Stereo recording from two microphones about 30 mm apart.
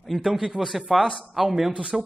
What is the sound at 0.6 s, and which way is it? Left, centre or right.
A man's voice, centre.